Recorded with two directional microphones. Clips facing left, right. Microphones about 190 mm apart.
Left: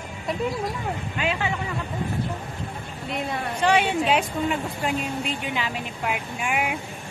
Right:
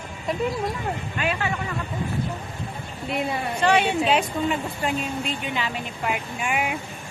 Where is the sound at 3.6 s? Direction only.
10° left (ahead or behind).